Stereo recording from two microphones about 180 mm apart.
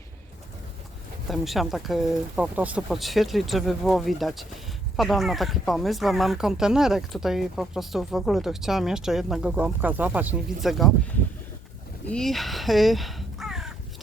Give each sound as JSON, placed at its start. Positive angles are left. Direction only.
{"t": 1.3, "sound": "speech", "side_deg": 0}
{"t": 12.0, "sound": "crow", "side_deg": 5}